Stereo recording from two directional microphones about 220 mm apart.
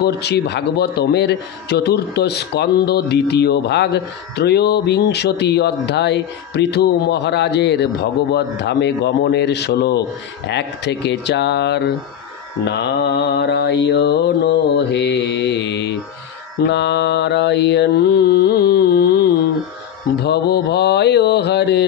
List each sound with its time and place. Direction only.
0.0 s a man's voice: 50° left (ahead or behind)
20.2 s a man's voice: 50° left (ahead or behind)